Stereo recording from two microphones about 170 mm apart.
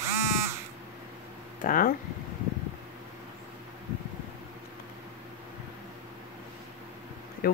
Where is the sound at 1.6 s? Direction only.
55° left (ahead or behind).